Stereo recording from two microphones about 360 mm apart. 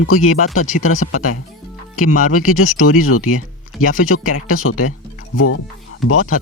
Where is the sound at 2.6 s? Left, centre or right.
Left.